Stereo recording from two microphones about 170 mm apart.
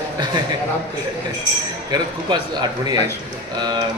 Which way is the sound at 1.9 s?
25° right (ahead or behind).